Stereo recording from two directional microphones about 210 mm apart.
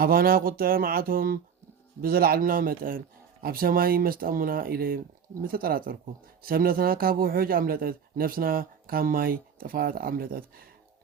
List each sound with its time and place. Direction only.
0.0 s a man's voice: 45° right (ahead or behind)